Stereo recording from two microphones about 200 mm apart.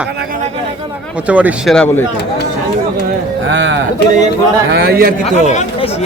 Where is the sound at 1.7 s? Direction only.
10° left (ahead or behind).